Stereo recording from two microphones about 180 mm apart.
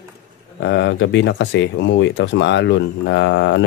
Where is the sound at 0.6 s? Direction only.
80° left.